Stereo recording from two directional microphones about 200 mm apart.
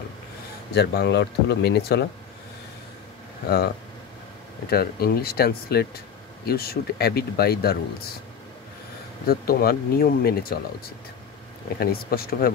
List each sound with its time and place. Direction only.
0.7 s speech: 55° left (ahead or behind)
3.4 s speech: 50° left (ahead or behind)
9.2 s speech: 45° left (ahead or behind)
11.8 s speech: 50° left (ahead or behind)